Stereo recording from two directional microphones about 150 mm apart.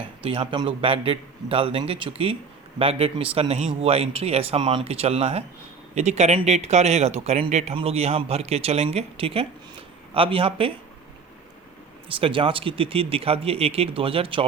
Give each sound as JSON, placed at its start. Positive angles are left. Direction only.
{"t": 0.2, "sound": "speech", "side_deg": -35}
{"t": 12.0, "sound": "speech", "side_deg": -35}